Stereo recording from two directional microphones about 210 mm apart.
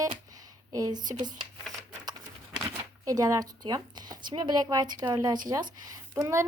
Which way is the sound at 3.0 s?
15° right (ahead or behind).